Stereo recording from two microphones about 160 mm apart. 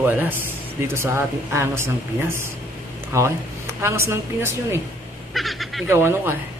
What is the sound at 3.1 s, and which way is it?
A woman's voice, 15° right (ahead or behind).